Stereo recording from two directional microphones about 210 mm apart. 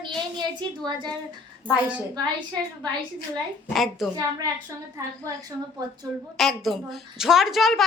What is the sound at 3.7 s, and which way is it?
Speech, centre (ahead or behind).